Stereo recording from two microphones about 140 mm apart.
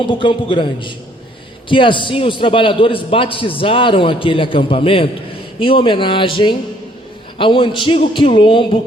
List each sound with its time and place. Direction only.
0.0 s a man's voice: 35° left (ahead or behind)